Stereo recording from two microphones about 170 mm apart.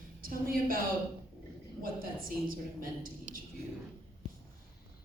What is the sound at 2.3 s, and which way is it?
Speech, 55° right (ahead or behind).